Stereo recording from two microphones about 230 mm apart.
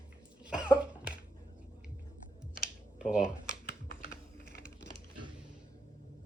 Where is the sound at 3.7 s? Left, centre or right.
Left.